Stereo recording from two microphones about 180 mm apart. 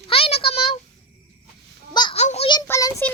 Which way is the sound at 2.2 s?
35° left (ahead or behind).